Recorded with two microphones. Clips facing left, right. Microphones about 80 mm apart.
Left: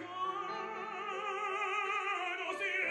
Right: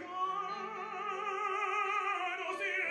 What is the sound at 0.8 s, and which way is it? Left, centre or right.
Opera, centre.